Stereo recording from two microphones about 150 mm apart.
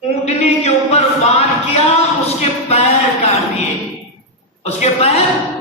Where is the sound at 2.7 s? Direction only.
45° left (ahead or behind).